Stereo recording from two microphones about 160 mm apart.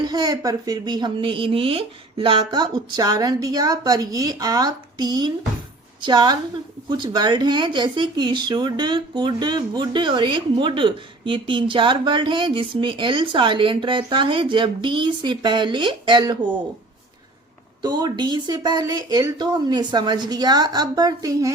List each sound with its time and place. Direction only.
0.0 s speech: 25° right (ahead or behind)
17.8 s speech: 25° right (ahead or behind)